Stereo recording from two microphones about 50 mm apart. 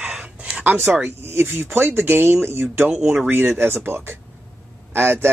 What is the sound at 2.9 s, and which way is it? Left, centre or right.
Speech, centre.